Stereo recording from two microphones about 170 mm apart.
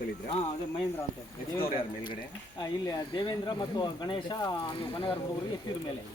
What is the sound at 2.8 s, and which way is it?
Speech, 25° left (ahead or behind).